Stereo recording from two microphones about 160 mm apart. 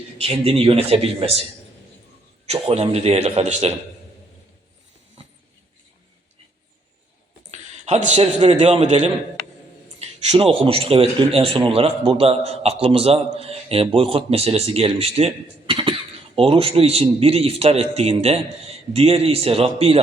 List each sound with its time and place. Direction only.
0.2 s a man's voice: 40° right (ahead or behind)
2.5 s a man's voice: 40° right (ahead or behind)
7.5 s a man's voice: 45° right (ahead or behind)